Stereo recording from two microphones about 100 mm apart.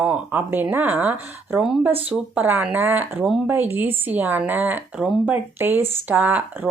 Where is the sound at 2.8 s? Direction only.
20° right (ahead or behind).